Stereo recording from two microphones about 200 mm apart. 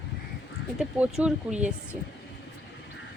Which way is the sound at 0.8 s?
5° right (ahead or behind).